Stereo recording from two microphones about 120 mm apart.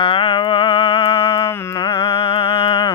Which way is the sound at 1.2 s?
25° left (ahead or behind).